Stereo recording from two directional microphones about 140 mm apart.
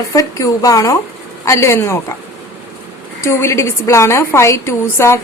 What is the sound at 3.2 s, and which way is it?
A woman's voice, 20° left (ahead or behind).